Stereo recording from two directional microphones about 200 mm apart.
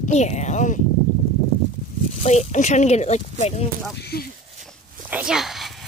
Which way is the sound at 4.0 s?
55° left (ahead or behind).